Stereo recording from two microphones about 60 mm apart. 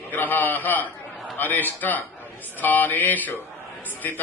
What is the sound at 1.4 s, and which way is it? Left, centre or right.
Speech, left.